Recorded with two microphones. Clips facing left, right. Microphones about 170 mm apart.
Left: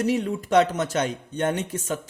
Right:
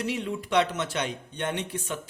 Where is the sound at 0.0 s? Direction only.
45° left (ahead or behind).